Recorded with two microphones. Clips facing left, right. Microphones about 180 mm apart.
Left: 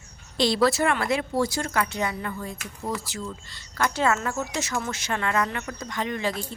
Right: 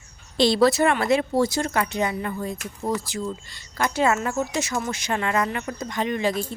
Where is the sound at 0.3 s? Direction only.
25° right (ahead or behind).